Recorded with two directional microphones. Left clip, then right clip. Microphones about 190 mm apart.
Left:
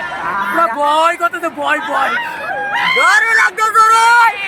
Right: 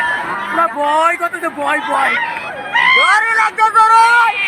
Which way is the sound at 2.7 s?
45° left (ahead or behind).